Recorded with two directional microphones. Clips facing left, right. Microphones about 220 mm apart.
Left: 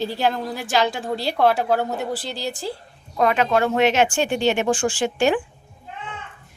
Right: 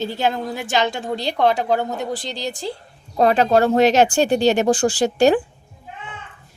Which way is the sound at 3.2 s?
35° right (ahead or behind).